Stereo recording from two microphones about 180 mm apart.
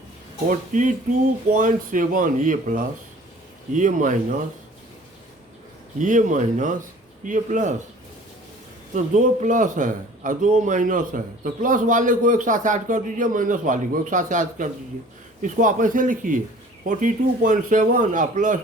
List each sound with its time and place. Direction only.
0.4 s speech: 45° right (ahead or behind)
6.0 s speech: 45° right (ahead or behind)
8.9 s speech: 45° right (ahead or behind)